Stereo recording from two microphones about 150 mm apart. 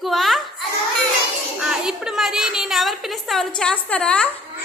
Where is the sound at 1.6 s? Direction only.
5° right (ahead or behind).